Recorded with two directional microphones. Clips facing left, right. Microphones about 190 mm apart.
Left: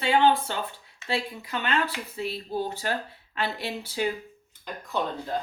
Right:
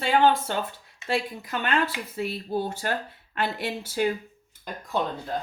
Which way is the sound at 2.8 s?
50° right (ahead or behind).